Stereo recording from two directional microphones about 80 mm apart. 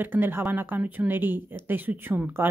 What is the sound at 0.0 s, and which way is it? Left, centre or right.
Speech, right.